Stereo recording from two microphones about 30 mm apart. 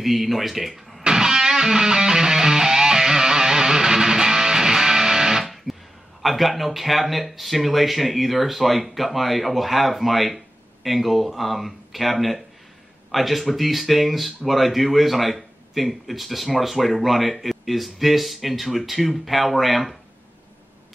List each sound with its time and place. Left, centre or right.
0.0 s speech: centre
1.1 s music: centre
5.4 s music: centre
6.2 s speech: centre